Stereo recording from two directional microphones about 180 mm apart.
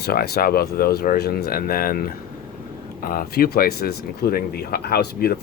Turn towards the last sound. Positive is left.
turn(degrees=60)  # may be behind; listen again after turning